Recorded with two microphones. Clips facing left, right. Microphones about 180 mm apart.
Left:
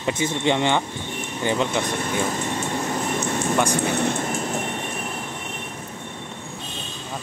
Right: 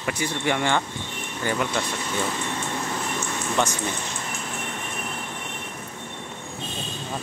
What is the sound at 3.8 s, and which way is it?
Speech, 60° left (ahead or behind).